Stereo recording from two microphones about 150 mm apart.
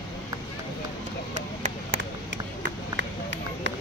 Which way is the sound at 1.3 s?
55° right (ahead or behind).